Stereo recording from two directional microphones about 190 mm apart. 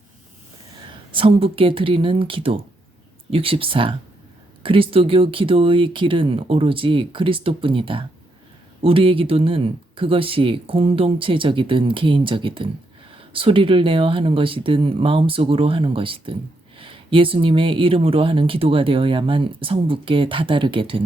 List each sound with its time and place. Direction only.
0.9 s speech: 25° right (ahead or behind)